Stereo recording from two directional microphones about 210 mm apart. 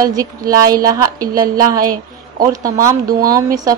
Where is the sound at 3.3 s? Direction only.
15° right (ahead or behind).